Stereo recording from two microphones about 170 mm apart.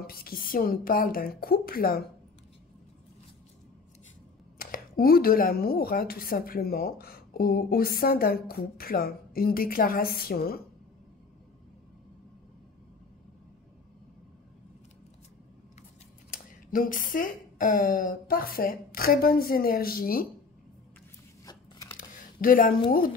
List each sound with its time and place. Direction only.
0.0 s speech: 60° left (ahead or behind)
4.6 s speech: 60° left (ahead or behind)
16.3 s speech: 55° left (ahead or behind)
21.5 s a sound: 20° left (ahead or behind)
21.9 s a sound: 50° left (ahead or behind)
22.8 s speech: 60° left (ahead or behind)